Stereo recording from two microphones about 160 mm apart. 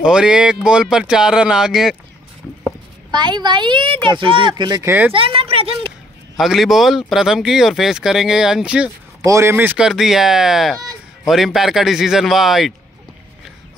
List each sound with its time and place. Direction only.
0.0 s speech: 5° right (ahead or behind)
3.1 s speech: 25° right (ahead or behind)
4.8 s speech: 10° right (ahead or behind)
5.1 s speech: 35° right (ahead or behind)
6.3 s speech: centre (ahead or behind)
9.2 s speech: 20° right (ahead or behind); by 12.7 s centre (ahead or behind)